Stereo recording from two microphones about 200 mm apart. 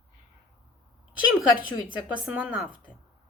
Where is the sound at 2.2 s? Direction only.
5° right (ahead or behind).